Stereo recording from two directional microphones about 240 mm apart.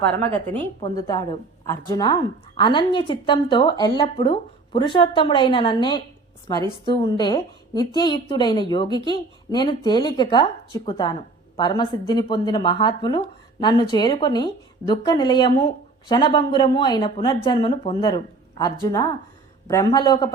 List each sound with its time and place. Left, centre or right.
0.8 s speech: centre